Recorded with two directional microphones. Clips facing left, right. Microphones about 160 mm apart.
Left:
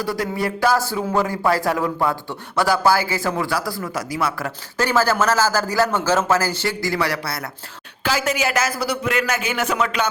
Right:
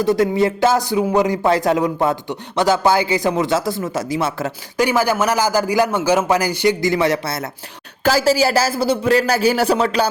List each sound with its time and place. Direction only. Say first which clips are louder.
0.0 s a man's voice: right 8 dB; 20° right (ahead or behind)
8.0 s a man's voice: right 6 dB; 35° right (ahead or behind)